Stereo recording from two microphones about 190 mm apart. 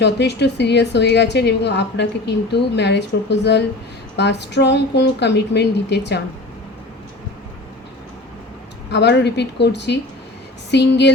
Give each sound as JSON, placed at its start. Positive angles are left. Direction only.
{"t": 0.0, "sound": "a woman's voice", "side_deg": 65}
{"t": 8.9, "sound": "a woman's voice", "side_deg": 65}